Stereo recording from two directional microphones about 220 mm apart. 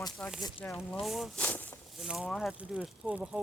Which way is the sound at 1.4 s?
10° left (ahead or behind).